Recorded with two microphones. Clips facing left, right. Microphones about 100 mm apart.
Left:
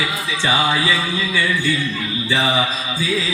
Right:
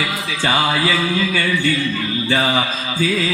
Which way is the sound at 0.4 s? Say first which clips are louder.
Right 1 dB; 45° right (ahead or behind).